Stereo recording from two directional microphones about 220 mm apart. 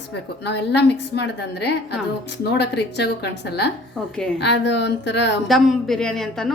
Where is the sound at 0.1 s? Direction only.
50° left (ahead or behind).